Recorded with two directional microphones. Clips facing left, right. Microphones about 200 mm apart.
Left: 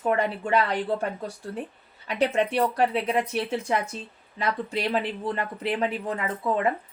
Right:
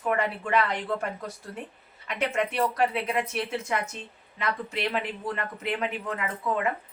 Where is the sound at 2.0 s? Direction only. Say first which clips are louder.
Left 4 dB; 30° left (ahead or behind).